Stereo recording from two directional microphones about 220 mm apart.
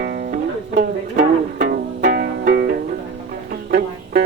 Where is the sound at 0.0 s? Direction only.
45° right (ahead or behind).